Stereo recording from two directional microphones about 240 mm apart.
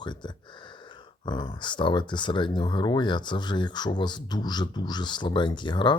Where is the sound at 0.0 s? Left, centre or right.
Centre.